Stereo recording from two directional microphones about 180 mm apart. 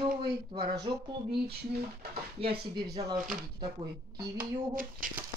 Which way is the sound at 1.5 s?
60° right (ahead or behind).